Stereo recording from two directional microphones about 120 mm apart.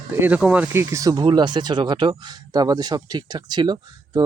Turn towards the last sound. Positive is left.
turn(degrees=-35)  # may be behind; listen again after turning